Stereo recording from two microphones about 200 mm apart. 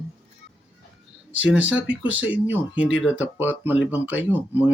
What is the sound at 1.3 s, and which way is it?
Speech, 75° left (ahead or behind).